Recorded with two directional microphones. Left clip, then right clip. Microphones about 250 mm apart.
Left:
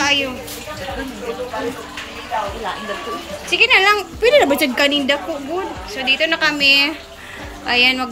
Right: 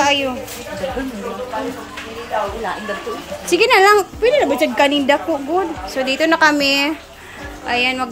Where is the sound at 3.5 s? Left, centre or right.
Right.